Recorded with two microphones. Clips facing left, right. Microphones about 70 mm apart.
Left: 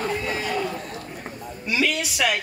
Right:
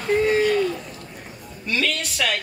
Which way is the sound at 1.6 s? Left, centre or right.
Centre.